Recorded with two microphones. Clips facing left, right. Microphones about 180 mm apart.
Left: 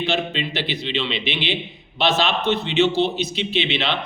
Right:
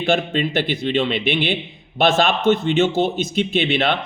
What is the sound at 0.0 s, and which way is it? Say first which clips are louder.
A man's voice: right 4 dB; 50° right (ahead or behind).